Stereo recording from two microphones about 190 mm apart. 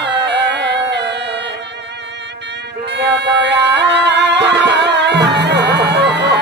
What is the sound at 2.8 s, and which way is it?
Music, 65° right (ahead or behind).